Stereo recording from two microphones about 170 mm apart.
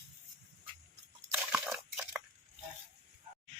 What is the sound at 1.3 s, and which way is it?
Crunch, 10° right (ahead or behind).